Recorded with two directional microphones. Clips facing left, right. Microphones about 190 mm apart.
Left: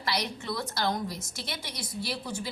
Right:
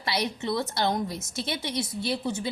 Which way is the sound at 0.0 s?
25° right (ahead or behind).